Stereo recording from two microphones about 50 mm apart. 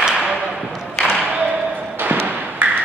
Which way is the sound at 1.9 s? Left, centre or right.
Right.